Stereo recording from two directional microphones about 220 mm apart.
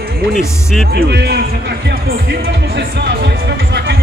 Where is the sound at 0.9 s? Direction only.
45° right (ahead or behind).